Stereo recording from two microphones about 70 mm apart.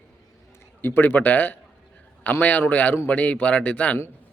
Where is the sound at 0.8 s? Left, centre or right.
Left.